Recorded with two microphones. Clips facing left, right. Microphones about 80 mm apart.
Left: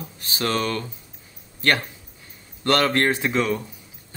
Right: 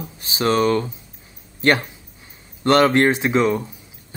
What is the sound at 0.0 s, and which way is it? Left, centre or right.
Speech, centre.